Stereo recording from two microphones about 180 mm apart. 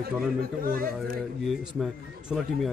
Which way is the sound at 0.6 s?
55° right (ahead or behind).